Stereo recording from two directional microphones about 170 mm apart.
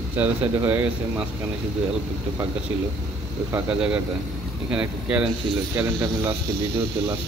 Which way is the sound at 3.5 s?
5° right (ahead or behind).